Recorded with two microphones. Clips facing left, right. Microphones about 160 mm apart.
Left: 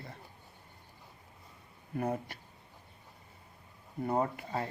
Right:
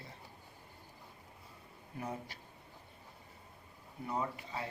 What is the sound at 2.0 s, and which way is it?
Speech, 60° left (ahead or behind).